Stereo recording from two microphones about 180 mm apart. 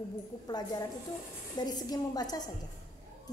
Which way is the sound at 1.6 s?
20° left (ahead or behind).